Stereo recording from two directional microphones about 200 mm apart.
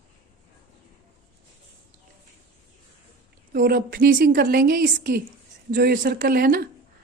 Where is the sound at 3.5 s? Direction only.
45° right (ahead or behind).